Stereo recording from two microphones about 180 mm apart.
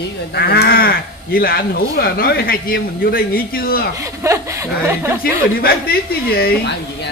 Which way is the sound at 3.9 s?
15° right (ahead or behind).